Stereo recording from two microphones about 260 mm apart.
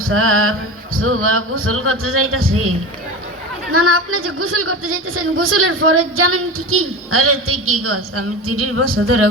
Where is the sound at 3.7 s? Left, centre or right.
Right.